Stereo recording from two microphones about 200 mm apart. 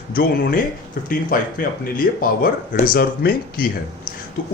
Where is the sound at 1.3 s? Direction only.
45° left (ahead or behind).